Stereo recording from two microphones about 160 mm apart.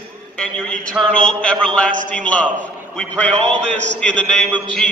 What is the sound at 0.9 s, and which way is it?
A man's voice, 5° left (ahead or behind).